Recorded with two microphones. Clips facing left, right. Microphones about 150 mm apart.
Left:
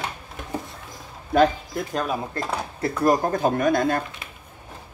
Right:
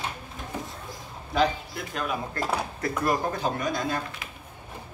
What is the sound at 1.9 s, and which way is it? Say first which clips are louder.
Speech: left 3 dB; 35° left (ahead or behind).